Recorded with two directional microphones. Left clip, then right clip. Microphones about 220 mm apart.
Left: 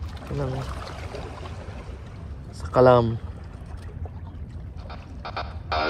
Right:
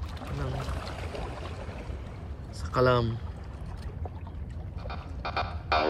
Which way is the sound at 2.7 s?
Centre (ahead or behind).